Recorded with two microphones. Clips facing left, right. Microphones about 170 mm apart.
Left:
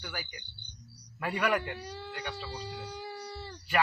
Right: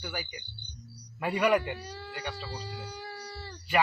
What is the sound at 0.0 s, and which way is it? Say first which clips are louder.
Speech: right 4 dB; 10° right (ahead or behind).